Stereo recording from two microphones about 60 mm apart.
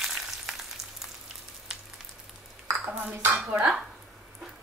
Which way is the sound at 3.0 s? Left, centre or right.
Right.